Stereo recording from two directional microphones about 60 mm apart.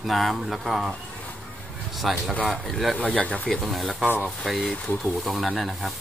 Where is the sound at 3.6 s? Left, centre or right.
Centre.